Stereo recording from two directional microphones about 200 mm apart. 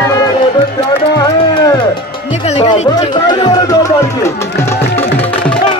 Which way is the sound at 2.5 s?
30° left (ahead or behind).